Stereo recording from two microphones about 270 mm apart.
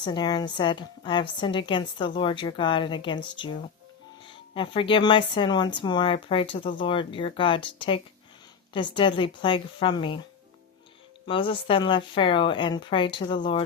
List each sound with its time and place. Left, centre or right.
0.0 s speech: centre
4.5 s speech: centre
11.3 s speech: centre